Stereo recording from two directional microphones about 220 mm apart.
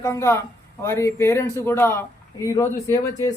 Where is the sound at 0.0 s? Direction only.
15° left (ahead or behind).